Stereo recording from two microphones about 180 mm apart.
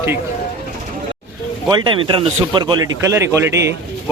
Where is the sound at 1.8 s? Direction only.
30° right (ahead or behind).